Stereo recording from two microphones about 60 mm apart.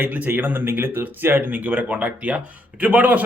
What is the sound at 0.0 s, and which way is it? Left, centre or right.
Speech, right.